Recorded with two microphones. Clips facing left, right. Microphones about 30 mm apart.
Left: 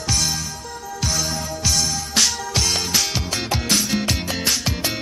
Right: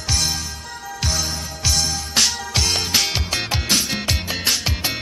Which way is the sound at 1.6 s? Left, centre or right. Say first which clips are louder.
Right 1 dB; centre.